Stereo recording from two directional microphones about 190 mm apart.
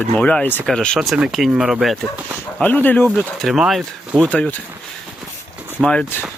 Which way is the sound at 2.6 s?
10° left (ahead or behind).